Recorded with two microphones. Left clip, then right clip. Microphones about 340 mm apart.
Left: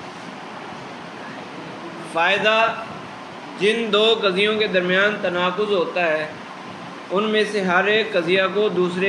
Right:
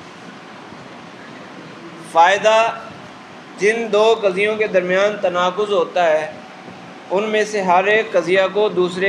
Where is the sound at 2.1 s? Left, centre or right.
Centre.